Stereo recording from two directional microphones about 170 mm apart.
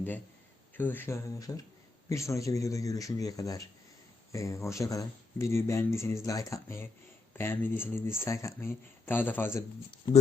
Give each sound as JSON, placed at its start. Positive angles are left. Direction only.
{"t": 0.8, "sound": "speech", "side_deg": 10}